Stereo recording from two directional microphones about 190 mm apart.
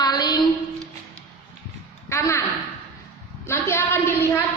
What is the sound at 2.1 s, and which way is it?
Speech, 15° left (ahead or behind).